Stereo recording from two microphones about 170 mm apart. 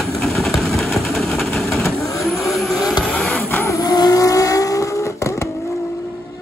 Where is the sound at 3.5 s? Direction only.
15° left (ahead or behind).